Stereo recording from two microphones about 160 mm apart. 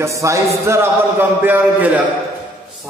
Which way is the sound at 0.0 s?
20° right (ahead or behind).